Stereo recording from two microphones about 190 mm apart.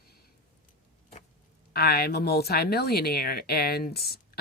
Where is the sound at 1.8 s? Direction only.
55° left (ahead or behind).